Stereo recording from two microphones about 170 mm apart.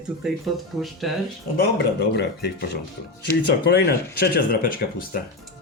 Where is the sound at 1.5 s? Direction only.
75° left (ahead or behind); by 5.2 s 55° left (ahead or behind).